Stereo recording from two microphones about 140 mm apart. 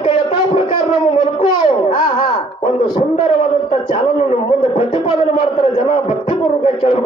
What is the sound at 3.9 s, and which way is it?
A man's voice, 45° left (ahead or behind).